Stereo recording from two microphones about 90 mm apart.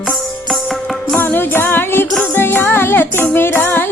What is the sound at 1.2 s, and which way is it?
Music, 25° left (ahead or behind).